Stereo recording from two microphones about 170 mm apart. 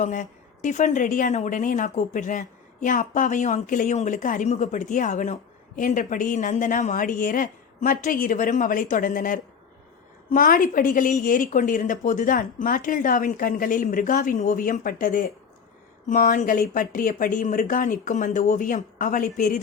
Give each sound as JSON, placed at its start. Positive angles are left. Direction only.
{"t": 0.0, "sound": "a woman's voice", "side_deg": 50}